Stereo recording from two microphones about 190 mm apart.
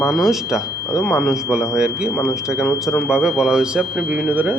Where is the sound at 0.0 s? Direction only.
Centre (ahead or behind).